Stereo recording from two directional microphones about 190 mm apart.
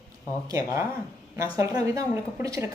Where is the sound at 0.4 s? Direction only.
15° right (ahead or behind).